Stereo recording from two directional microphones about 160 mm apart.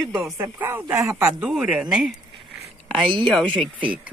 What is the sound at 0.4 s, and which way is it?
Speech, 15° right (ahead or behind).